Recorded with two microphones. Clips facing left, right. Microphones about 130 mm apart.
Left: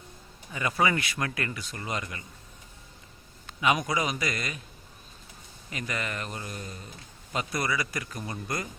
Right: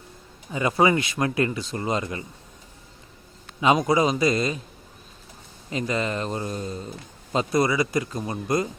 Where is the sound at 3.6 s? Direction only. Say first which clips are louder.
Right 7 dB; 25° right (ahead or behind).